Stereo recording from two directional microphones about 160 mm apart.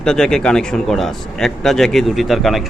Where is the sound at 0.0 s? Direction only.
5° left (ahead or behind).